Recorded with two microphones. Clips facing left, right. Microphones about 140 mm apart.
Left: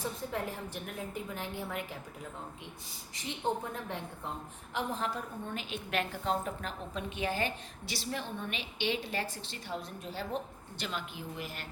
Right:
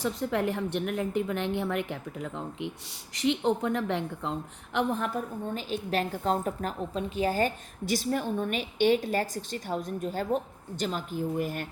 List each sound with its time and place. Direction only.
0.0 s a woman's voice: 75° right (ahead or behind); by 5.2 s 55° right (ahead or behind)
5.5 s a woman's voice: 35° right (ahead or behind)